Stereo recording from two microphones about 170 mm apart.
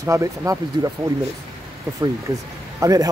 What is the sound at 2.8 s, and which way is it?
Speech, 20° right (ahead or behind).